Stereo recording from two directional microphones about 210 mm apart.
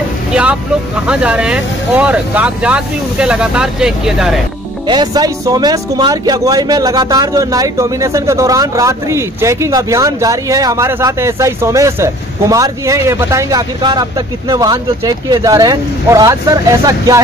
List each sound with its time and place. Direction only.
0.3 s speech: 5° right (ahead or behind)
4.8 s speech: 20° right (ahead or behind)